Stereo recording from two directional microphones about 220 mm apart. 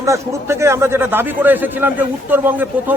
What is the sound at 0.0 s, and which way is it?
A man's voice, 15° right (ahead or behind).